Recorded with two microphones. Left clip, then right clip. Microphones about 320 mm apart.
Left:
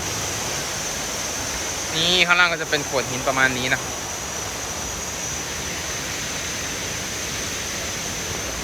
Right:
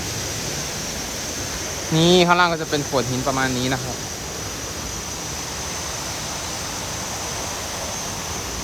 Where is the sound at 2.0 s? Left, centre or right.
Centre.